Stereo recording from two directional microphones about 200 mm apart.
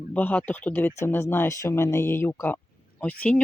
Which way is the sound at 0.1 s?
10° left (ahead or behind).